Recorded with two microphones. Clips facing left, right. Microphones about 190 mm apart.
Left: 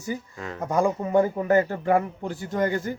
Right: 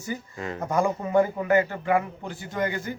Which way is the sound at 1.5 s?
40° left (ahead or behind).